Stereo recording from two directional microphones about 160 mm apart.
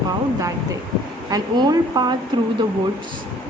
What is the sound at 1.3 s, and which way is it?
Speech, 25° right (ahead or behind).